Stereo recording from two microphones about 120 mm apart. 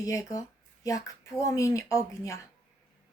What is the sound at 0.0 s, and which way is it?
A woman's voice, 30° left (ahead or behind).